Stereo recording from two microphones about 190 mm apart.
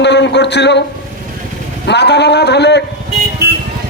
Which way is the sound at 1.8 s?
65° left (ahead or behind).